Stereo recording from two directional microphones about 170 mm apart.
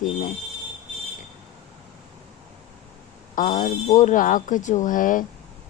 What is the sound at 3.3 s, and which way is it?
Speech, 50° left (ahead or behind).